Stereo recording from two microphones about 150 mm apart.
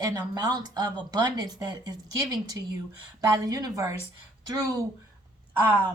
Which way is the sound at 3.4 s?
25° right (ahead or behind).